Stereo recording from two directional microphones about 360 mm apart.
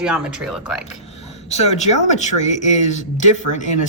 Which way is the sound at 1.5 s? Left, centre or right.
Centre.